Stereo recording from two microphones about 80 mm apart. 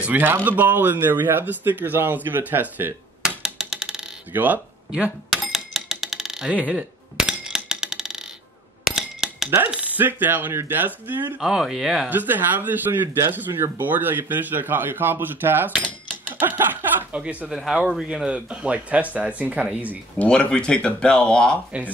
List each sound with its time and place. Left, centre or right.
0.0 s speech: right
3.2 s a sound: centre
4.3 s speech: right
5.3 s a sound: centre
6.5 s a sound: centre
8.9 s cutlery: centre
9.6 s speech: centre
11.4 s speech: centre
12.1 s speech: right
17.5 s speech: centre
20.2 s speech: centre